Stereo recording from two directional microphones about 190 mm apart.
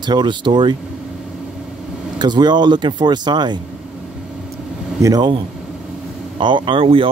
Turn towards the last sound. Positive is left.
turn(degrees=-30)  # may be behind; listen again after turning